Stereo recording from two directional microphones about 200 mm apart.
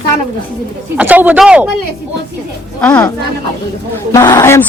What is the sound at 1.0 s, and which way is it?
Speech, 10° right (ahead or behind).